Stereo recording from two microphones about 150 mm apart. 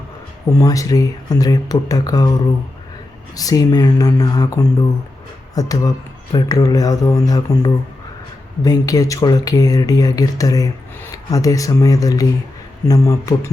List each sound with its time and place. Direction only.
0.6 s speech: 25° left (ahead or behind)
3.3 s speech: 25° left (ahead or behind)